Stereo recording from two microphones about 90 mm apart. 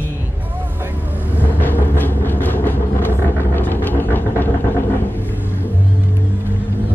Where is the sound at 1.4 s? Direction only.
20° left (ahead or behind).